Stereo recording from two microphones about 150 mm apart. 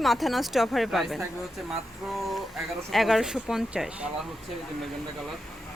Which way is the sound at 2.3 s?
Centre (ahead or behind).